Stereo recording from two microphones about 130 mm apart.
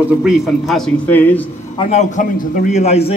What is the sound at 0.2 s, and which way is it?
Speech, centre (ahead or behind).